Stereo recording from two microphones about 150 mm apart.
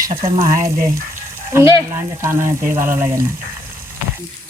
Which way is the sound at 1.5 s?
15° right (ahead or behind).